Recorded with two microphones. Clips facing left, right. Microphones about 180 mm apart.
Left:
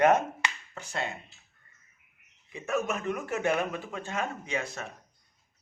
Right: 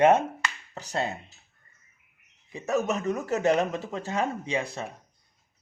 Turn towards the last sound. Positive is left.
turn(degrees=-30)  # may be behind; listen again after turning